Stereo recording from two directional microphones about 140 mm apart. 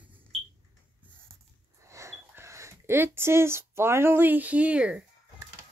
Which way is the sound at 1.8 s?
20° right (ahead or behind).